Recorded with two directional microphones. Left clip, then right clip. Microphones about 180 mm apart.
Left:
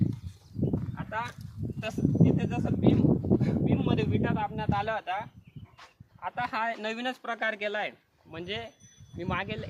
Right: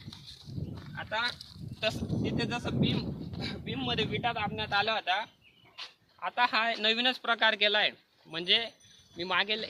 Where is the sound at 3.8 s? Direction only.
20° right (ahead or behind); by 9.7 s centre (ahead or behind).